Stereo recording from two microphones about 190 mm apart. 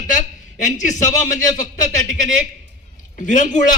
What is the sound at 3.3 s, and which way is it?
Speech, 40° left (ahead or behind).